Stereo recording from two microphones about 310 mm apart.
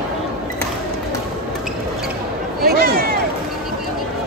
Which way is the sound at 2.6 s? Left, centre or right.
Right.